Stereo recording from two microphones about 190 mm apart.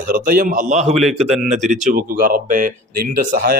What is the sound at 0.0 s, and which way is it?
A man's voice, 50° right (ahead or behind).